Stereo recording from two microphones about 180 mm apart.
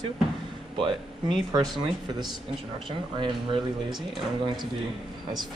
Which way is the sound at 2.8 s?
30° right (ahead or behind).